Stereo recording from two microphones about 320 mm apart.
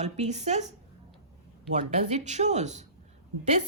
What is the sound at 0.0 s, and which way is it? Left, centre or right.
Speech, right.